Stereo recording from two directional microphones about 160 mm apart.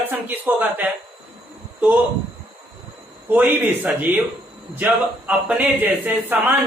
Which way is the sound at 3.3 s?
10° right (ahead or behind).